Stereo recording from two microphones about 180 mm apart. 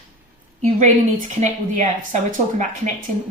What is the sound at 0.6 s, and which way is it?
A woman's voice, 40° right (ahead or behind).